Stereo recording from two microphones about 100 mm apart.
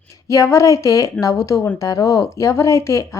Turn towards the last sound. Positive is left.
turn(degrees=30)  # may be behind; listen again after turning